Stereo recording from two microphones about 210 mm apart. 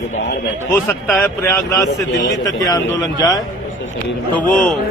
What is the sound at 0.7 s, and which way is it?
A man's voice, 10° left (ahead or behind).